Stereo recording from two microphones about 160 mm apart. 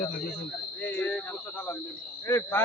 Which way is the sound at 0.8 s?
10° left (ahead or behind).